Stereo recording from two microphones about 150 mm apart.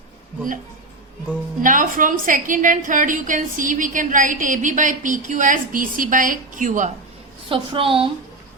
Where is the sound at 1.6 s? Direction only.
60° right (ahead or behind).